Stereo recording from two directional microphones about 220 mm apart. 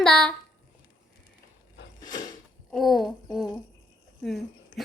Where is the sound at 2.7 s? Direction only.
Centre (ahead or behind).